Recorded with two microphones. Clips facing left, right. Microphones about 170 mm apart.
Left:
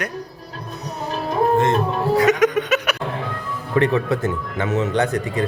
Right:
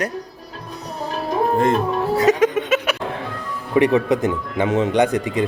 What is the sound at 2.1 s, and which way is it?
Chuckle, 30° right (ahead or behind).